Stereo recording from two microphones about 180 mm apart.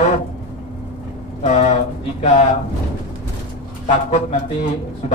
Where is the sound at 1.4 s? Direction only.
40° left (ahead or behind).